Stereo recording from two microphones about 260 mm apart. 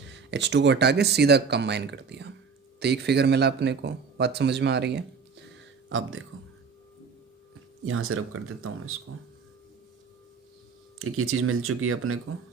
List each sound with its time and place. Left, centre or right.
0.3 s speech: right
7.9 s speech: right
11.0 s speech: right